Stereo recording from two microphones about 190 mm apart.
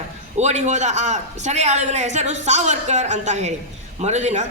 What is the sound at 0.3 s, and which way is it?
A man's voice, 35° right (ahead or behind).